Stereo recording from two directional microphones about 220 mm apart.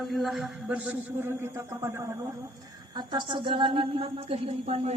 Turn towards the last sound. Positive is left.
turn(degrees=-30)  # may be behind; listen again after turning